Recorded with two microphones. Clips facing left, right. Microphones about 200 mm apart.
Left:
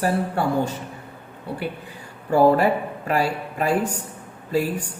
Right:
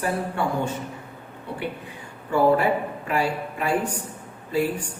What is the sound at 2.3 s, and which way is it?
A woman's voice, 40° left (ahead or behind).